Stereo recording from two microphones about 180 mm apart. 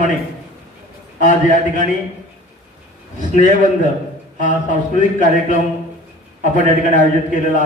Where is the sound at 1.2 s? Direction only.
45° left (ahead or behind).